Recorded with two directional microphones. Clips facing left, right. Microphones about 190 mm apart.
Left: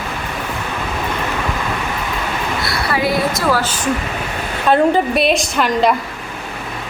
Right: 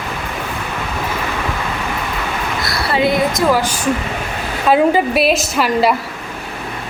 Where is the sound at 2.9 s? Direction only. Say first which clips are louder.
Right 3 dB; 20° right (ahead or behind); by 5.9 s 5° right (ahead or behind).